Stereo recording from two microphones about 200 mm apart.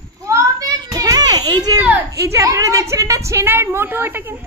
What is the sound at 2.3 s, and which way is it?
A woman's voice, 15° right (ahead or behind).